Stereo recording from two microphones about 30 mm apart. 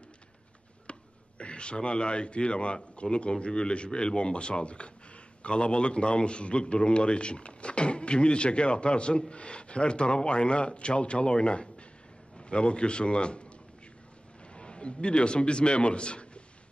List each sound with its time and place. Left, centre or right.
0.9 s a sound: left
1.4 s a man's voice: left
14.5 s a man's voice: left